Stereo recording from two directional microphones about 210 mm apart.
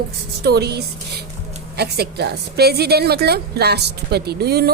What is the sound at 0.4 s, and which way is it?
A woman's voice, 50° right (ahead or behind).